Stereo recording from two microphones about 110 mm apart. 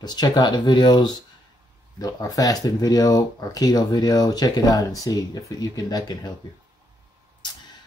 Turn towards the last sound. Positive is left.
turn(degrees=40)  # may be behind; listen again after turning